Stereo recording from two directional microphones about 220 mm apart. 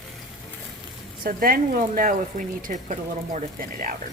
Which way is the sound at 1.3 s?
40° right (ahead or behind).